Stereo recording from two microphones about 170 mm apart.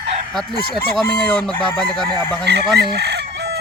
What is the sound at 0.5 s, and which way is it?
Chicken, 60° left (ahead or behind).